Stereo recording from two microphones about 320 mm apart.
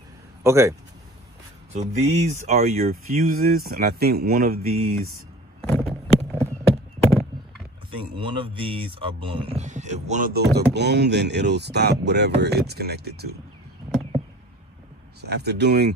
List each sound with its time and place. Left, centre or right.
0.4 s speech: centre
1.7 s speech: right
5.6 s a sound: centre
8.0 s speech: centre; by 13.4 s right
15.2 s speech: right